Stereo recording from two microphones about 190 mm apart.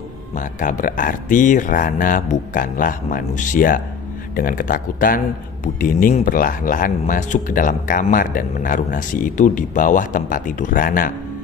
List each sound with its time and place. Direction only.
0.3 s speech: 45° left (ahead or behind)